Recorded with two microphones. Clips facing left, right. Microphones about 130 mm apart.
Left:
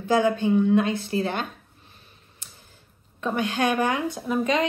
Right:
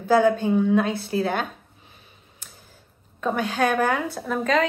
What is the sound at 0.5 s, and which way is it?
Speech, 55° right (ahead or behind).